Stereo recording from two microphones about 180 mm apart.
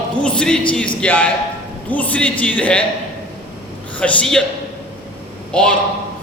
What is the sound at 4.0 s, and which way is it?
Speech, 5° left (ahead or behind).